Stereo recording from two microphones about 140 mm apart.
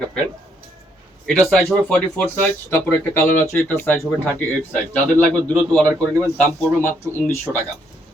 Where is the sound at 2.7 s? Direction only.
15° left (ahead or behind).